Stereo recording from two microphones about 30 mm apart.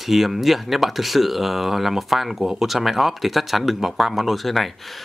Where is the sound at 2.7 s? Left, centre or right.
Centre.